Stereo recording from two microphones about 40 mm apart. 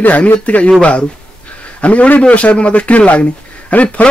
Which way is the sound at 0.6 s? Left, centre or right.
Left.